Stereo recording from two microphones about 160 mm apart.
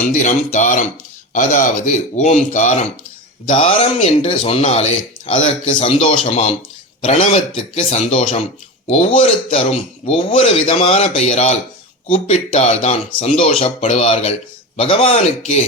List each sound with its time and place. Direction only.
0.0 s speech: 50° left (ahead or behind)
3.6 s speech: 40° left (ahead or behind)